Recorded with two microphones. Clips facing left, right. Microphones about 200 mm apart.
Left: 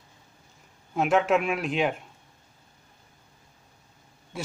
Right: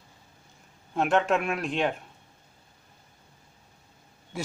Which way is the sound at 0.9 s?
5° left (ahead or behind).